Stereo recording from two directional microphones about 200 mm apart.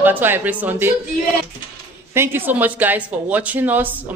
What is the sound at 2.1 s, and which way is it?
A woman's voice, 10° right (ahead or behind).